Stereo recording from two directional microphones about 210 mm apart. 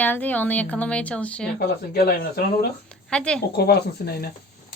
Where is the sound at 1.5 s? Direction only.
50° left (ahead or behind).